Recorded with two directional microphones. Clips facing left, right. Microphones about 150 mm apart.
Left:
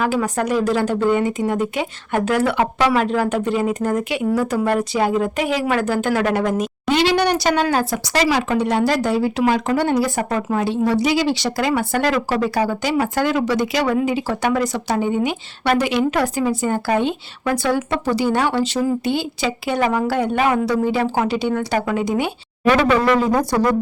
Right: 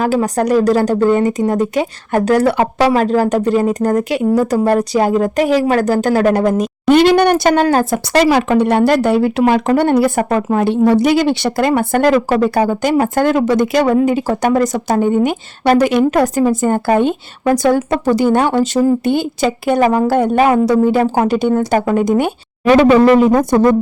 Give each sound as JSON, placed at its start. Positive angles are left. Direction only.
{"t": 0.0, "sound": "speech", "side_deg": -35}
{"t": 6.8, "sound": "speech", "side_deg": -50}
{"t": 22.7, "sound": "speech", "side_deg": -25}